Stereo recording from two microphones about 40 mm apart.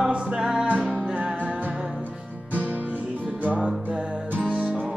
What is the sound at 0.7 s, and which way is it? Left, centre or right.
Music, right.